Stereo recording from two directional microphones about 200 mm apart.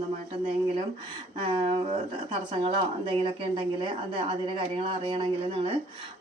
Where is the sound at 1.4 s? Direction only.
25° right (ahead or behind).